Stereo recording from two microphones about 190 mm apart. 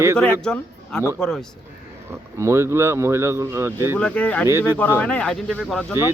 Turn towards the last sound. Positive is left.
turn(degrees=0)  # may be behind; listen again after turning